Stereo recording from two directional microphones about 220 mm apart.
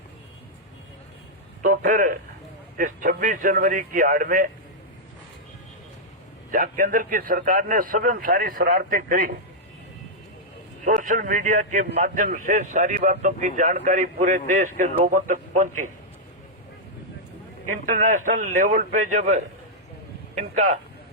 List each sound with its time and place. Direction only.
1.6 s a man's voice: 40° right (ahead or behind)
6.5 s a man's voice: 40° right (ahead or behind)
10.8 s a man's voice: 35° right (ahead or behind)
17.9 s a man's voice: 35° right (ahead or behind)